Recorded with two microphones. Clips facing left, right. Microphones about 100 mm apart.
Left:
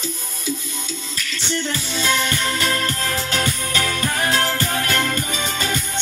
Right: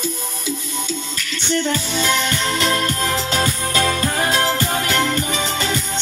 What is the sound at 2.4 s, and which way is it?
Music, 25° right (ahead or behind).